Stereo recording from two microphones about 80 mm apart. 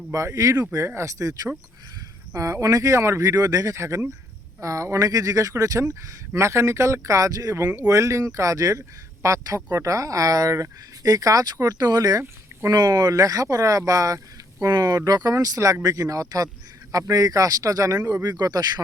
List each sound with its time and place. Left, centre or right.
0.1 s speech: right